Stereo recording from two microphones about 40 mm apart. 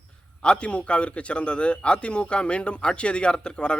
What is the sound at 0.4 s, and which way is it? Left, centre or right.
A man's voice, left.